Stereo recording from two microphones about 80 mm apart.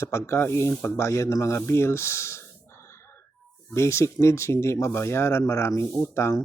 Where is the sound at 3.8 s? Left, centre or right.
Left.